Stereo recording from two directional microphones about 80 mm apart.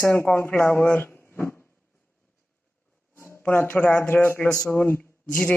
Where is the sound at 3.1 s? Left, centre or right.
Left.